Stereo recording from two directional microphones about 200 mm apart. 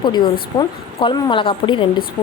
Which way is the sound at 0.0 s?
20° left (ahead or behind).